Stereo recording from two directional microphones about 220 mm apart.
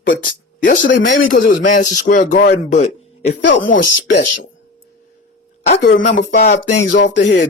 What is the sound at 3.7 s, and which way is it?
Speech, 40° left (ahead or behind).